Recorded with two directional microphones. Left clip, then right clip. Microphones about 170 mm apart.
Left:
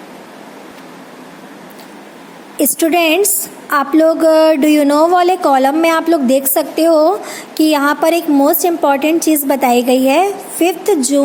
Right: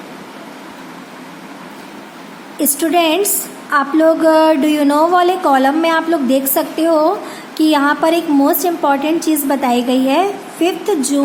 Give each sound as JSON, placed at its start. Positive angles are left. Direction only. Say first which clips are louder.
{"t": 2.6, "sound": "a woman's voice", "louder": "left 2 dB", "side_deg": 40}